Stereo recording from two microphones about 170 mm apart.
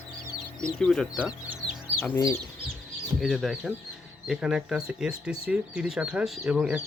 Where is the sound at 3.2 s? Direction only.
Centre (ahead or behind).